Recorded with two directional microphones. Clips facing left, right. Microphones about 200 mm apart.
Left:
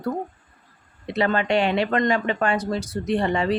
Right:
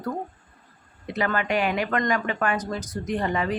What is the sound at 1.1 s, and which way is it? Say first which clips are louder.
Speech: left 4 dB; 25° left (ahead or behind).